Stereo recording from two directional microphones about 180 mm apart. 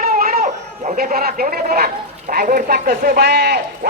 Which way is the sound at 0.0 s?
55° right (ahead or behind).